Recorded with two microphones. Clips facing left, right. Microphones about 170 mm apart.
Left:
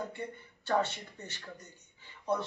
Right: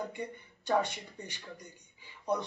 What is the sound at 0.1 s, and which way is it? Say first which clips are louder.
Speech: right 1 dB; 15° right (ahead or behind).